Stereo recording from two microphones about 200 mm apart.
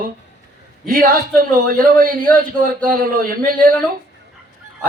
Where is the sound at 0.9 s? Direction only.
45° right (ahead or behind).